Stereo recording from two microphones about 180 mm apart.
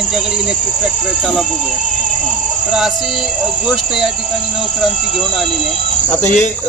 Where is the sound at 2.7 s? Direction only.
Centre (ahead or behind).